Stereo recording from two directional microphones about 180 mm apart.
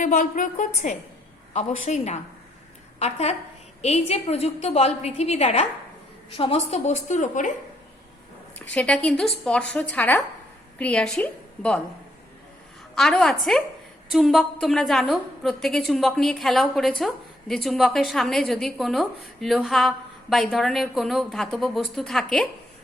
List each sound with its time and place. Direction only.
0.0 s a woman's voice: 45° left (ahead or behind)
8.7 s a woman's voice: 5° left (ahead or behind)
13.0 s a woman's voice: 5° left (ahead or behind)